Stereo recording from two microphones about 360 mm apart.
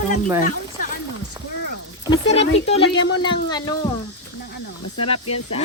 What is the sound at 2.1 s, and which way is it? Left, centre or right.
Speech, centre.